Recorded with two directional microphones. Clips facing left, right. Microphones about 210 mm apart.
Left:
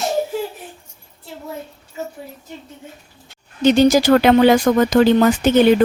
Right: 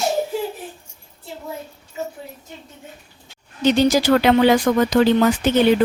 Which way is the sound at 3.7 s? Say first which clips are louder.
Left 3 dB; 45° left (ahead or behind).